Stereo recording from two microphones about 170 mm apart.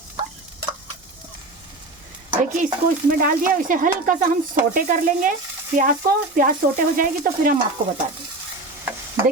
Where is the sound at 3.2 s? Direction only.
55° right (ahead or behind).